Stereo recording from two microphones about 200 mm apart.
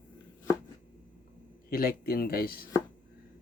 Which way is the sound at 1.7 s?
45° left (ahead or behind).